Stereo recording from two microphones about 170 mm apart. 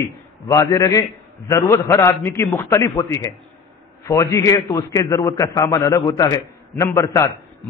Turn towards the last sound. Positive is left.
turn(degrees=15)  # may be behind; listen again after turning